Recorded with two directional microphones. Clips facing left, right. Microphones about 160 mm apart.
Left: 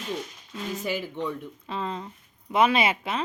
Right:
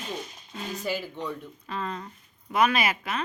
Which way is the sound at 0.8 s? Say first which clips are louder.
Left 1 dB; 20° left (ahead or behind).